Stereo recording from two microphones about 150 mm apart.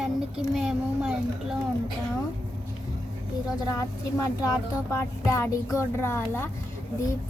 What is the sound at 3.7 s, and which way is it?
Speech, 20° left (ahead or behind).